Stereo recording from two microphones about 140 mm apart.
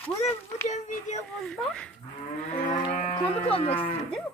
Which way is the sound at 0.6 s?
55° left (ahead or behind).